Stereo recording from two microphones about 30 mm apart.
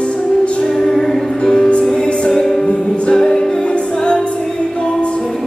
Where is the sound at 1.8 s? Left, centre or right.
Centre.